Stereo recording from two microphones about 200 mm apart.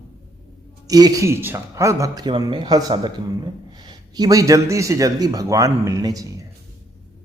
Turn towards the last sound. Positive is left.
turn(degrees=-15)  # may be behind; listen again after turning